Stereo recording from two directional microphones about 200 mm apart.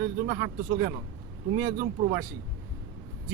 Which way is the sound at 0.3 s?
50° right (ahead or behind).